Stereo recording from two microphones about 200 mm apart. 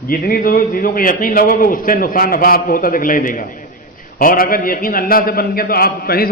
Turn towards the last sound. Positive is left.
turn(degrees=45)  # may be behind; listen again after turning